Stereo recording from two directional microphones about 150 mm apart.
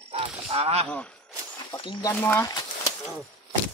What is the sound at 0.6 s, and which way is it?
Speech, 45° right (ahead or behind).